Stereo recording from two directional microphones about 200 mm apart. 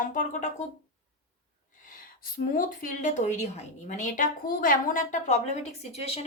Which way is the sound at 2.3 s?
40° left (ahead or behind).